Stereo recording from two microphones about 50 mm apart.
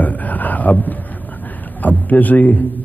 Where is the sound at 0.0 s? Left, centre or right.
Left.